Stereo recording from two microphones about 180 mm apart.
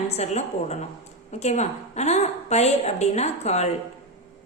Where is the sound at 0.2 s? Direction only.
40° left (ahead or behind).